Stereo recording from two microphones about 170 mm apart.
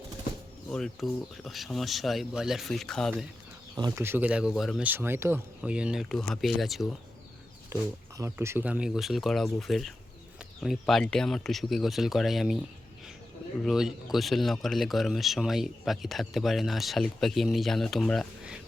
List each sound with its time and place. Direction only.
0.7 s speech: centre (ahead or behind)
3.8 s speech: 20° right (ahead or behind); by 6.8 s centre (ahead or behind)
7.7 s speech: 15° right (ahead or behind)
13.7 s speech: centre (ahead or behind)